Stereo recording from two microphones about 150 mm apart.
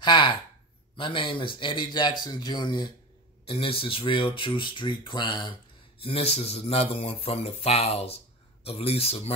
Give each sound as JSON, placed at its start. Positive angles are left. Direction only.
{"t": 0.0, "sound": "speech", "side_deg": 30}